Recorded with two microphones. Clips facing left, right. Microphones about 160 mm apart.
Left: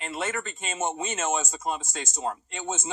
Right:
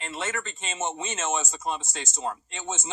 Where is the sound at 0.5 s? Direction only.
10° left (ahead or behind).